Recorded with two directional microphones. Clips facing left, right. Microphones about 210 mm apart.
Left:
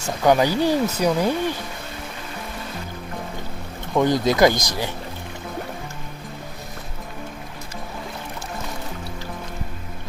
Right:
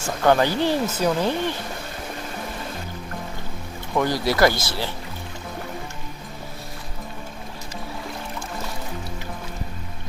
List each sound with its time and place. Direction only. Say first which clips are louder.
0.2 s speech: left 1 dB; 10° left (ahead or behind)
3.9 s speech: left 3 dB; 20° left (ahead or behind)